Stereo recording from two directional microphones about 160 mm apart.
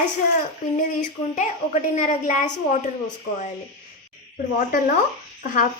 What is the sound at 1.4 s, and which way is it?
A woman's voice, 50° left (ahead or behind).